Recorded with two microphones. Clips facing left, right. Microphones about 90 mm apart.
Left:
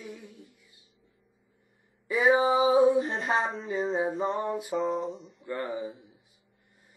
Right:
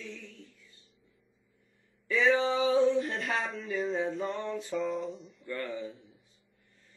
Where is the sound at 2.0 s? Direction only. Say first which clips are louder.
Left 3 dB; 15° left (ahead or behind).